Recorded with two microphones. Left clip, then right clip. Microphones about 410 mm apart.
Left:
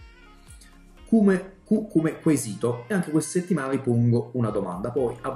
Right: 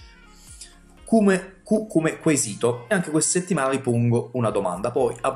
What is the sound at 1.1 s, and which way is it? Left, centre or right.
Speech, right.